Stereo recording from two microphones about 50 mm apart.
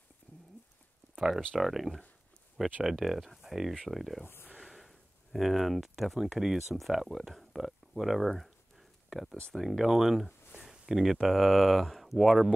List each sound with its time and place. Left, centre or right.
1.1 s a sound: centre
1.6 s speech: centre
4.2 s speech: left
4.6 s speech: centre